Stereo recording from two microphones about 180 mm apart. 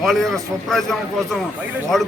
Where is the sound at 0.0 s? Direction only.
Centre (ahead or behind).